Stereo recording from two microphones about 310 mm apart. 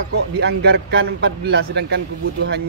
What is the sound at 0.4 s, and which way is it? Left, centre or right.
A man's voice, right.